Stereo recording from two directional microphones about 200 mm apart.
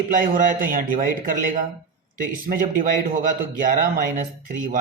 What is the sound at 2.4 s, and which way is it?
Speech, 45° right (ahead or behind).